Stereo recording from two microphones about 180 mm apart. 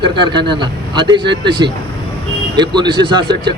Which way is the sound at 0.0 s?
25° right (ahead or behind).